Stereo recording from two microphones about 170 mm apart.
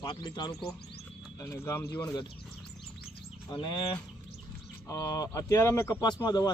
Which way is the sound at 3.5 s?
30° left (ahead or behind).